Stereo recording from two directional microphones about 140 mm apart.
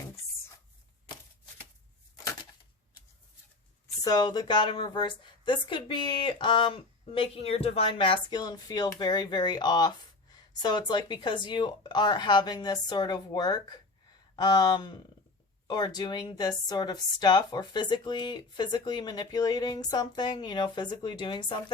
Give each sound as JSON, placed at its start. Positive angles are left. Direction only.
{"t": 4.0, "sound": "a woman's voice", "side_deg": 30}